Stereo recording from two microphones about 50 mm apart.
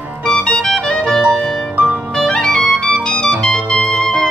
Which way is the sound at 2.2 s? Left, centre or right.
Centre.